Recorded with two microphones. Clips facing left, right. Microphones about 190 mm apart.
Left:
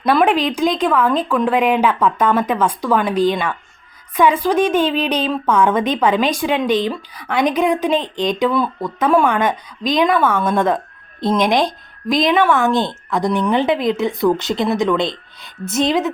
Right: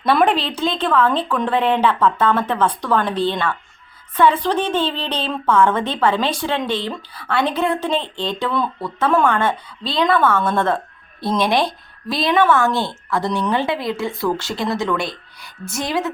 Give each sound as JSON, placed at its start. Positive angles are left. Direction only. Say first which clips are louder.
{"t": 0.1, "sound": "speech", "louder": "left 1 dB", "side_deg": 0}
{"t": 0.3, "sound": "a woman's voice", "louder": "left 5 dB", "side_deg": 10}